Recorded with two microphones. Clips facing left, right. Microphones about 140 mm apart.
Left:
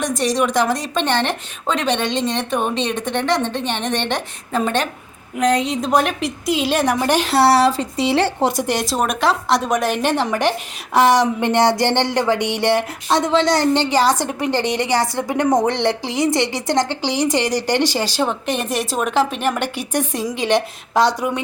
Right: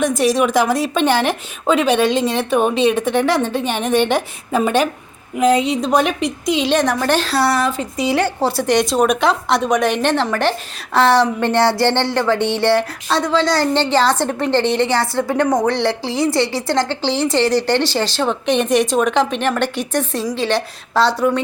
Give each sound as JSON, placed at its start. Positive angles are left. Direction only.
{"t": 0.0, "sound": "a woman's voice", "side_deg": 0}
{"t": 7.3, "sound": "a woman's voice", "side_deg": 30}
{"t": 8.7, "sound": "a woman's voice", "side_deg": 0}